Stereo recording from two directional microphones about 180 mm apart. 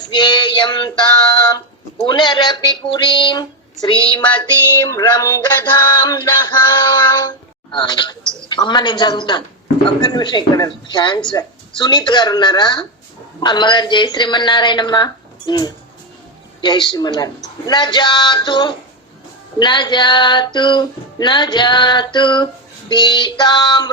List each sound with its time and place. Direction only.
0.1 s female singing: 25° left (ahead or behind)
1.5 s speech: 20° left (ahead or behind)
4.8 s a sound: 20° left (ahead or behind)